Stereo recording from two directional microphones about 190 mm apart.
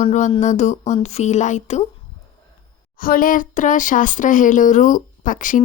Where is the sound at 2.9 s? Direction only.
50° left (ahead or behind).